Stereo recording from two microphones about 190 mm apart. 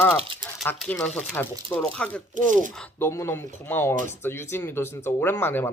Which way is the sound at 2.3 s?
40° right (ahead or behind).